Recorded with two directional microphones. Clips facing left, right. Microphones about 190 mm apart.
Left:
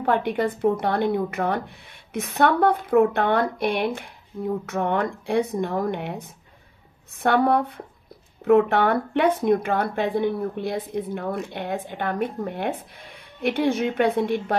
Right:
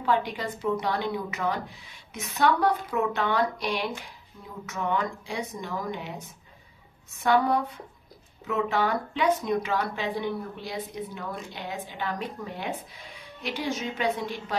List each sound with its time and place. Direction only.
0.0 s speech: 55° left (ahead or behind)